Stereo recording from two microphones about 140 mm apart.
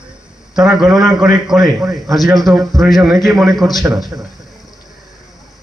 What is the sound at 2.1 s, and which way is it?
A man's voice, centre (ahead or behind).